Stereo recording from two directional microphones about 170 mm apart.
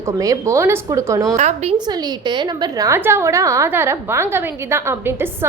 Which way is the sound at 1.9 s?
25° right (ahead or behind).